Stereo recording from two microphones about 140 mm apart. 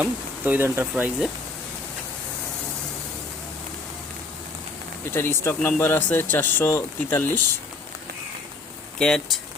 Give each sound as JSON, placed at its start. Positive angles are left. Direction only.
{"t": 0.0, "sound": "speech", "side_deg": -10}
{"t": 5.1, "sound": "speech", "side_deg": 15}
{"t": 9.0, "sound": "speech", "side_deg": 5}